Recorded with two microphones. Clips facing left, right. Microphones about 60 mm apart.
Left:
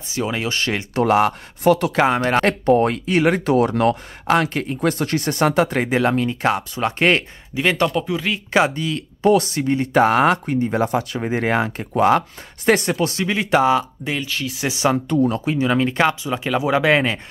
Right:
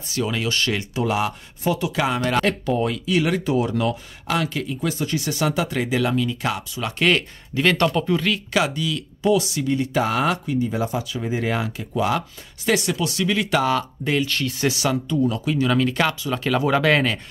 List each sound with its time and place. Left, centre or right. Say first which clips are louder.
0.1 s speech: left 1 dB; left
0.9 s speech: left 9 dB; left
2.0 s speech: left 4 dB; left
3.4 s speech: left 5 dB; left
4.3 s speech: left 5 dB; left
7.5 s speech: even; centre
8.3 s speech: left 3 dB; left
14.0 s speech: right 2 dB; centre
14.7 s speech: left 6 dB; left
15.2 s speech: left 2 dB; left
15.5 s speech: left 1 dB; left